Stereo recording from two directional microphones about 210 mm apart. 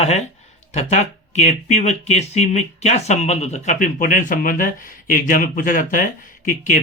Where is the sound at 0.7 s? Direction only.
30° left (ahead or behind).